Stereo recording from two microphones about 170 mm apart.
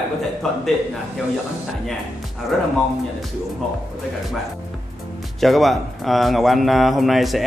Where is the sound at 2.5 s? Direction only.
Centre (ahead or behind).